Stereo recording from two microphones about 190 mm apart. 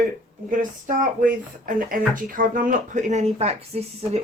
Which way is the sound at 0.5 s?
45° right (ahead or behind).